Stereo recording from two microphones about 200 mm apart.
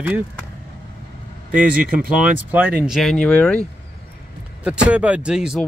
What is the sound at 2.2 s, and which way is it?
Speech, 5° right (ahead or behind).